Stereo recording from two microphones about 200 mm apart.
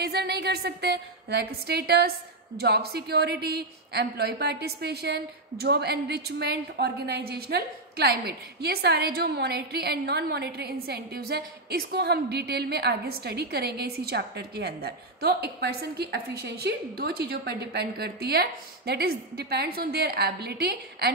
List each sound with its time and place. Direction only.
0.0 s a woman's voice: 55° right (ahead or behind)